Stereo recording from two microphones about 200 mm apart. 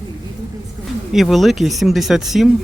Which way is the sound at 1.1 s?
Centre (ahead or behind).